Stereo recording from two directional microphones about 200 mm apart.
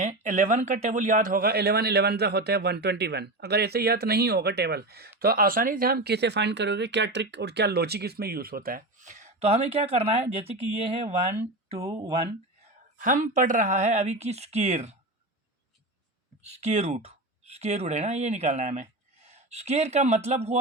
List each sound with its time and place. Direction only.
0.0 s speech: 35° right (ahead or behind)
13.0 s speech: 40° right (ahead or behind)
16.4 s speech: 30° right (ahead or behind)